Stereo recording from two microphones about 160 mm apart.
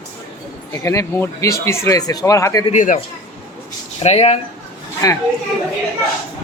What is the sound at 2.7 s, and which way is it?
Speech, 45° left (ahead or behind).